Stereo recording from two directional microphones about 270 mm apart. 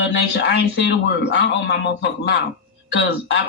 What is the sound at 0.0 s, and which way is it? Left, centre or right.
Speech, left.